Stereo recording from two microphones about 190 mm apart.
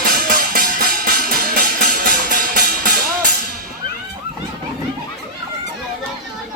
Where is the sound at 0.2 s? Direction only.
50° right (ahead or behind).